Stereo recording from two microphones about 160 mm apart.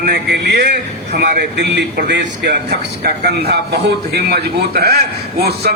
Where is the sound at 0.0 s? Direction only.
85° right.